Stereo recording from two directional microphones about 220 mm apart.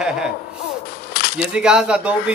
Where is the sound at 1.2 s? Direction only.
45° left (ahead or behind).